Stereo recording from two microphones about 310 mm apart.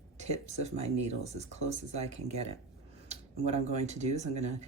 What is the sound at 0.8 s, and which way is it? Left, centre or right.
Speech, right.